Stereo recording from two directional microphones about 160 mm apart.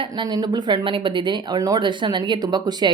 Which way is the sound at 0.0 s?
30° right (ahead or behind).